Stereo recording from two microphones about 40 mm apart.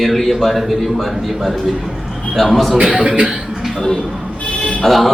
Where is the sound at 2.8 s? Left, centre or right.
Centre.